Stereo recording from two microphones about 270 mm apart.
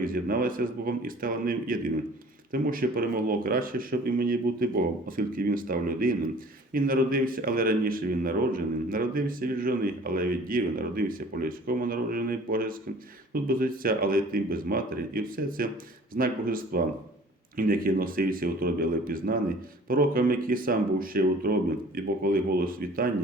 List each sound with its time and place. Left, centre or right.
0.0 s speech: right